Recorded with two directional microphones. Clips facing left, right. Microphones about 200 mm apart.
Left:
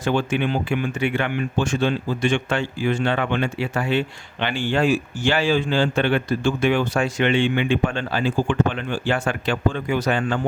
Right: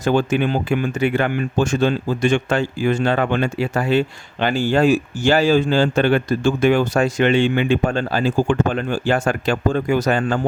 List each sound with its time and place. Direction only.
0.0 s speech: 40° right (ahead or behind)